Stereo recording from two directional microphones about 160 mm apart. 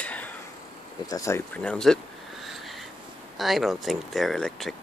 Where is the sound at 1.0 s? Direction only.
20° left (ahead or behind).